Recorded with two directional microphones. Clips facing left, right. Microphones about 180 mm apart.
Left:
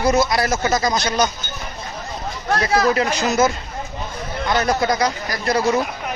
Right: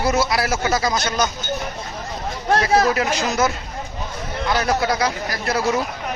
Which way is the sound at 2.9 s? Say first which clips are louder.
Left 2 dB; 5° right (ahead or behind).